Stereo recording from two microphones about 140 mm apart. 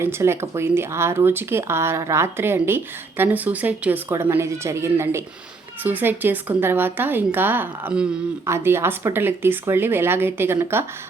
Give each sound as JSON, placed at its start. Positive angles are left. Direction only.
{"t": 0.0, "sound": "speech", "side_deg": -20}